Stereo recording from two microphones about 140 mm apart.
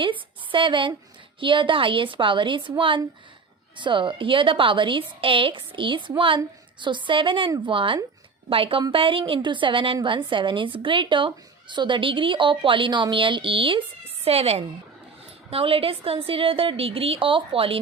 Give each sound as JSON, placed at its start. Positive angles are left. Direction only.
{"t": 0.0, "sound": "a woman's voice", "side_deg": -35}